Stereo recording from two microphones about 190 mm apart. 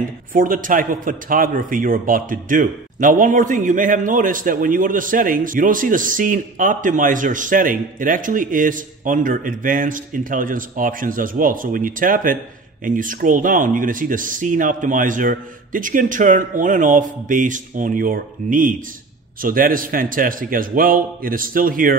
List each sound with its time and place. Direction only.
0.3 s a man's voice: 45° right (ahead or behind)